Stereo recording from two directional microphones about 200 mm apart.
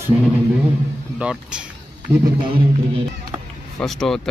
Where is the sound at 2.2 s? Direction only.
25° right (ahead or behind).